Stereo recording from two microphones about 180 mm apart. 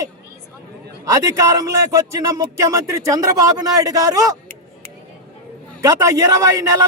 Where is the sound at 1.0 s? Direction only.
20° right (ahead or behind).